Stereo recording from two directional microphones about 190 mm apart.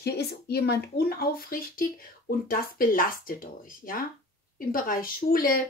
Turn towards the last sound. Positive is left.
turn(degrees=50)  # may be behind; listen again after turning